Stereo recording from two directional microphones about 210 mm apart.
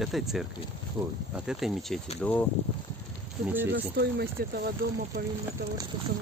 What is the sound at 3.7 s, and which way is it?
Speech, 50° right (ahead or behind).